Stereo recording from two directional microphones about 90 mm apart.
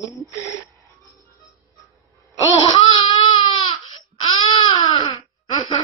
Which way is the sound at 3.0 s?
55° left (ahead or behind).